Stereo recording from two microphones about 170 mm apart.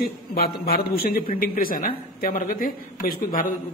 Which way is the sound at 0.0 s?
65° left (ahead or behind).